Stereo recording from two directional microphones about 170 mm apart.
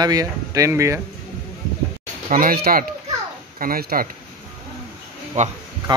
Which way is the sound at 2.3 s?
55° right (ahead or behind).